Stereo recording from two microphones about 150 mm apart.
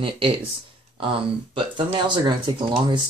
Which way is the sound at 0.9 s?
35° right (ahead or behind).